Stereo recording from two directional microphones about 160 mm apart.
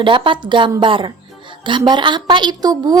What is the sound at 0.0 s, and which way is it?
A woman's voice, 30° right (ahead or behind).